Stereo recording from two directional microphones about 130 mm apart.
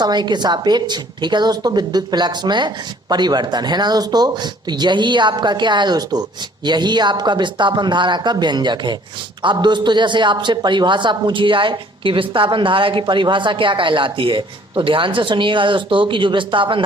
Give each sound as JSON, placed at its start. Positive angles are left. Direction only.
{"t": 0.0, "sound": "a woman's voice", "side_deg": -35}